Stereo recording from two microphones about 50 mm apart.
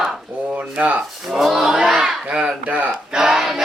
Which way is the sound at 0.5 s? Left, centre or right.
Right.